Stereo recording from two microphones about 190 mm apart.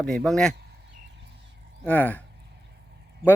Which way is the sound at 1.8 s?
10° left (ahead or behind).